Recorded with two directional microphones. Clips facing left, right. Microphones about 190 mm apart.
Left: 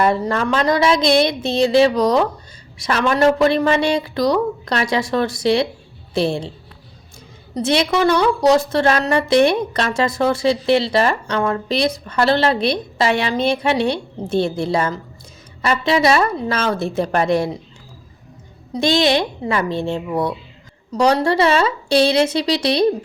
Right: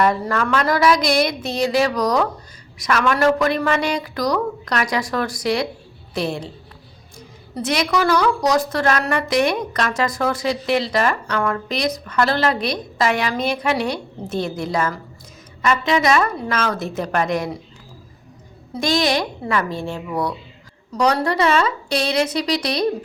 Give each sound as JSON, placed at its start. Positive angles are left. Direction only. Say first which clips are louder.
{"t": 0.0, "sound": "a woman's voice", "louder": "left 2 dB", "side_deg": 25}
{"t": 7.5, "sound": "a woman's voice", "louder": "left 3 dB", "side_deg": 30}
{"t": 18.7, "sound": "a woman's voice", "louder": "left 3 dB", "side_deg": 25}